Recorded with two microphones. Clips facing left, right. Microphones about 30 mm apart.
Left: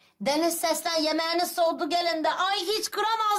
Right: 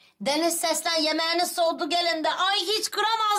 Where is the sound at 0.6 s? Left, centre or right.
Right.